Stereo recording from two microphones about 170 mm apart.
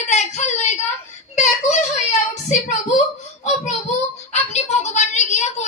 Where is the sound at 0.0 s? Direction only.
45° left (ahead or behind).